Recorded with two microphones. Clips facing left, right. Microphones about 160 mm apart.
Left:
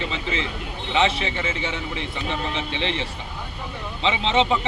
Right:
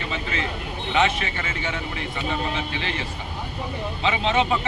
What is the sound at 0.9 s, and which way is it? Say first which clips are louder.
Speech: left 1 dB; 25° left (ahead or behind).